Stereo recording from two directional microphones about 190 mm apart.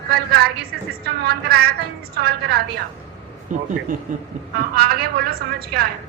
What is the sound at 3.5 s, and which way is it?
Speech, 40° right (ahead or behind).